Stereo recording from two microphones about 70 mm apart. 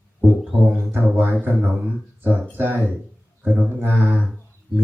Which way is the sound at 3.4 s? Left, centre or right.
Right.